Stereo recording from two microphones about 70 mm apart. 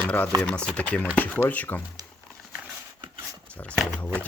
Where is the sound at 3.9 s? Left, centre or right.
Left.